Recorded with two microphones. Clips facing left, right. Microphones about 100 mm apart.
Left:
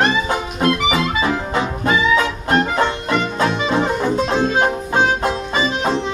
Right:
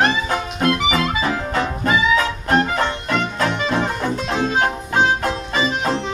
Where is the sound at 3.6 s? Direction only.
15° left (ahead or behind).